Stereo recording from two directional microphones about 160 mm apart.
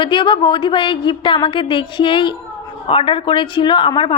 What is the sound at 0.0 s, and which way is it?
A woman's voice, 30° left (ahead or behind).